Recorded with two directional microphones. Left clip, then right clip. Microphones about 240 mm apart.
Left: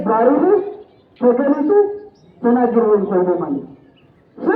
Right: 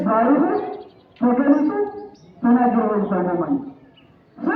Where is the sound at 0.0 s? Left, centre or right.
Left.